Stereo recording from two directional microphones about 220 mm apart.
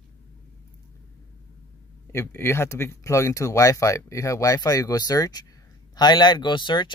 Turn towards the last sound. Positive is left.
turn(degrees=20)  # may be behind; listen again after turning